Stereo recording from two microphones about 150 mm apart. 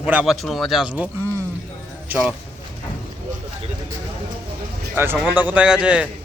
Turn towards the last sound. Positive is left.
turn(degrees=-5)  # may be behind; listen again after turning